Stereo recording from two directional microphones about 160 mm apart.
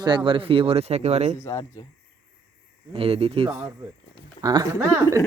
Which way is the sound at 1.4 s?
20° left (ahead or behind).